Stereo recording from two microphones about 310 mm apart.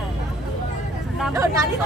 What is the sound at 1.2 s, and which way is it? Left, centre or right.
Speech, centre.